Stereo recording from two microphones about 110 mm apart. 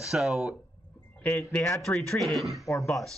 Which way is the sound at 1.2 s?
10° left (ahead or behind).